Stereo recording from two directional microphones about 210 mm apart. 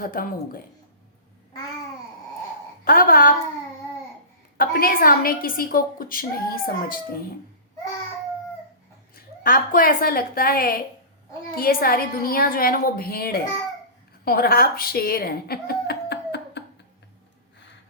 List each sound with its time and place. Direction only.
0.0 s a woman's voice: 45° left (ahead or behind)
2.8 s a woman's voice: 40° left (ahead or behind)
4.5 s a woman's voice: 45° left (ahead or behind)
9.1 s a woman's voice: 45° left (ahead or behind)